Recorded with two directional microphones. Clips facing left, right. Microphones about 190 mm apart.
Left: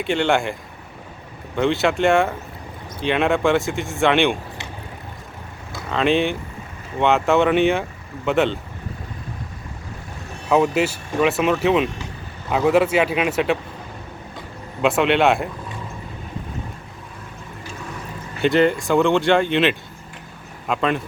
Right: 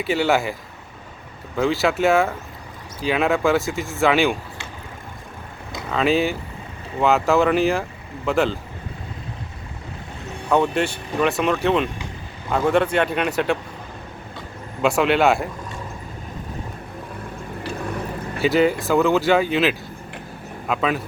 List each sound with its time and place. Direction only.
0.0 s speech: 5° right (ahead or behind)
1.5 s speech: centre (ahead or behind)
5.9 s speech: 5° right (ahead or behind)
10.5 s speech: 5° left (ahead or behind)
14.8 s speech: centre (ahead or behind)
17.6 s a sound: 60° right (ahead or behind)
18.4 s speech: 5° right (ahead or behind)